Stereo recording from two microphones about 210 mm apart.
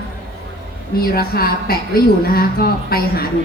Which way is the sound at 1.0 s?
45° left (ahead or behind).